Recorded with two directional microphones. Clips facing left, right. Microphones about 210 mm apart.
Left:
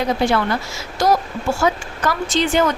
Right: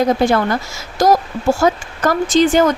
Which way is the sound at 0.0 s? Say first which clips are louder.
Right 4 dB; 45° right (ahead or behind).